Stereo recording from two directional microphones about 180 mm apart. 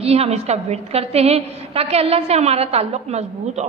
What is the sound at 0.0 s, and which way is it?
A woman's voice, 35° right (ahead or behind).